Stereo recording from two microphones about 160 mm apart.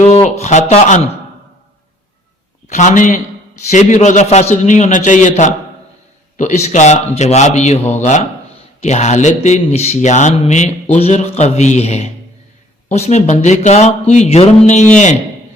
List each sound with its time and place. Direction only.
0.0 s speech: 45° left (ahead or behind)
2.6 s speech: 50° left (ahead or behind)